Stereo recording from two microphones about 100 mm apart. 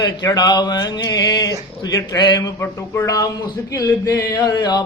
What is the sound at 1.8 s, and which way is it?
Speech, 35° left (ahead or behind).